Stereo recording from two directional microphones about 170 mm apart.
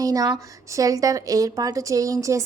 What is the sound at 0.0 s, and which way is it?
A woman's voice, 20° right (ahead or behind).